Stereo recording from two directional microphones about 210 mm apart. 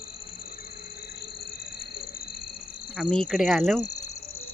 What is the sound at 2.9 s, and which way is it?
Speech, centre (ahead or behind).